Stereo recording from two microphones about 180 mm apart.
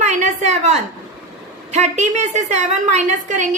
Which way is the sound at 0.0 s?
40° right (ahead or behind).